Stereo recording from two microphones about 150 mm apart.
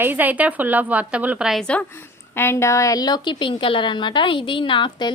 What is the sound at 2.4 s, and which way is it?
A woman's voice, 20° left (ahead or behind).